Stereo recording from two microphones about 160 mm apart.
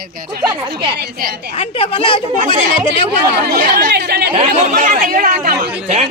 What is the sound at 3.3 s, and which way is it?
Speech, 70° right (ahead or behind).